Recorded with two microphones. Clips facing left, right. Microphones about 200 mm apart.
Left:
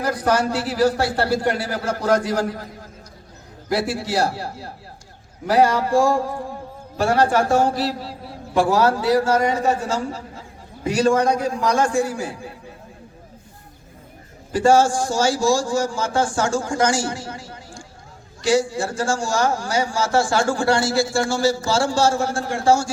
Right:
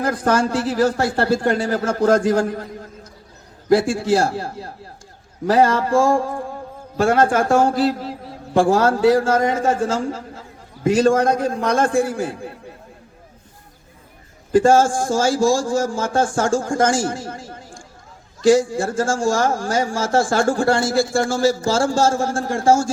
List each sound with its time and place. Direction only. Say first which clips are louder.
0.0 s speech: right 2 dB; 50° right (ahead or behind)
3.7 s speech: right 7 dB; 50° right (ahead or behind)
14.5 s speech: right 2 dB; 50° right (ahead or behind)